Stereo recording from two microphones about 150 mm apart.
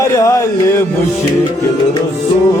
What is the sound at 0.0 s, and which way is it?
Music, 20° left (ahead or behind).